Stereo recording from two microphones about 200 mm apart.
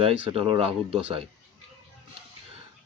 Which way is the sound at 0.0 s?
30° right (ahead or behind).